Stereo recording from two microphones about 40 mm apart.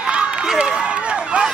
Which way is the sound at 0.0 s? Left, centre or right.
Right.